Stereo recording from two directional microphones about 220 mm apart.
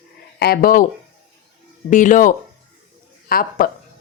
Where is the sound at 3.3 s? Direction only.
40° left (ahead or behind).